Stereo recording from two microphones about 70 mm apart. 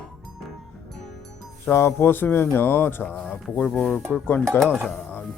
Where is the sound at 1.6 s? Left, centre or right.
Left.